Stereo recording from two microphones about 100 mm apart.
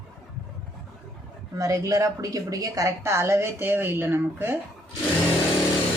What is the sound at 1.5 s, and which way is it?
A woman's voice, 35° right (ahead or behind).